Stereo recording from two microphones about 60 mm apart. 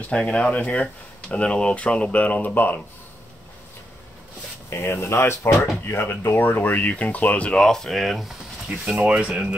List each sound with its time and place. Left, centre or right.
0.1 s speech: centre
4.6 s speech: left
7.5 s speech: centre
9.0 s speech: right